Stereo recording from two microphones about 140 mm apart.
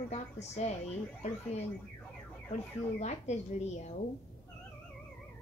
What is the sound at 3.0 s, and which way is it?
Speech, 55° left (ahead or behind).